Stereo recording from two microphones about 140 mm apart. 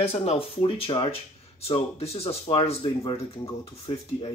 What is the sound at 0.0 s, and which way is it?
Speech, 45° left (ahead or behind).